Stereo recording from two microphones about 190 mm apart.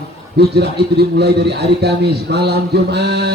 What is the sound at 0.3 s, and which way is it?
A man's voice, 60° right (ahead or behind).